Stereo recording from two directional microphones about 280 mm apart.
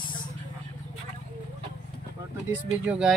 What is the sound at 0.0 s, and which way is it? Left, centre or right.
Vehicle, centre.